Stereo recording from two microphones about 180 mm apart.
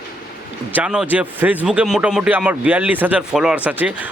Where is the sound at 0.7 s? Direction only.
5° right (ahead or behind).